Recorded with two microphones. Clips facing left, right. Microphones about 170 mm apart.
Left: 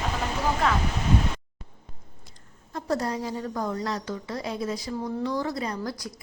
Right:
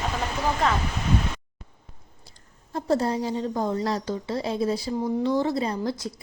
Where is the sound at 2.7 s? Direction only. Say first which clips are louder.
Right 4 dB; 30° right (ahead or behind).